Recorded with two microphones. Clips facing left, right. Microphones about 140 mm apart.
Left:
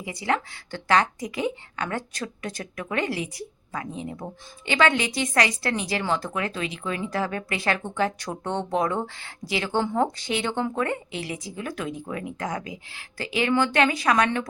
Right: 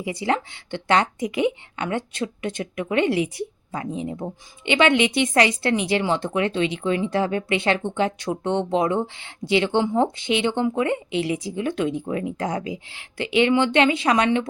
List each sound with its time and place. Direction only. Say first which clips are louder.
0.0 s speech: right 3 dB; 25° right (ahead or behind)